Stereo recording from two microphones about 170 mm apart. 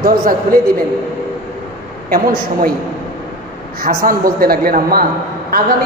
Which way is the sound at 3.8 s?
55° right (ahead or behind).